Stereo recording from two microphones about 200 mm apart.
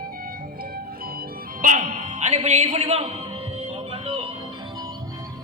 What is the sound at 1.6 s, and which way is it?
Speech, 40° right (ahead or behind).